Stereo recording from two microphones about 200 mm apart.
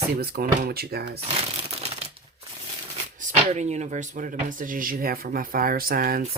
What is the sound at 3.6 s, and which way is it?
Speech, 35° right (ahead or behind).